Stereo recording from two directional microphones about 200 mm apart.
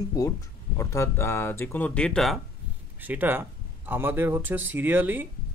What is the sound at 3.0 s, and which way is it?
Speech, 10° right (ahead or behind).